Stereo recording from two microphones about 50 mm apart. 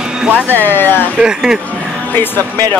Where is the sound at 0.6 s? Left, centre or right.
Left.